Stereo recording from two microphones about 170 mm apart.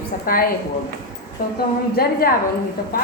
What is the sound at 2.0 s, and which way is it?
Speech, 60° left (ahead or behind).